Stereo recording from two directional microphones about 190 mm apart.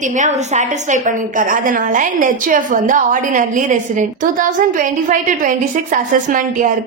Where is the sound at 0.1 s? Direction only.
40° right (ahead or behind).